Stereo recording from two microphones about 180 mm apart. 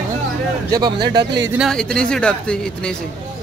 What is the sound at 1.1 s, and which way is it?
Speech, 25° right (ahead or behind).